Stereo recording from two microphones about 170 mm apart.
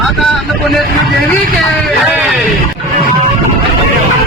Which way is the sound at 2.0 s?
Centre (ahead or behind).